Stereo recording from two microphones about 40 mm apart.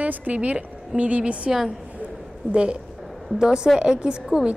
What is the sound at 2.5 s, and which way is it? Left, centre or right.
A woman's voice, right.